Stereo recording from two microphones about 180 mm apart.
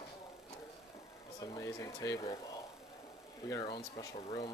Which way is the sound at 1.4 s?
20° left (ahead or behind).